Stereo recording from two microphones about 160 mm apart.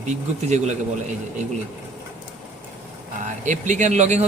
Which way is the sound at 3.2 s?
50° right (ahead or behind).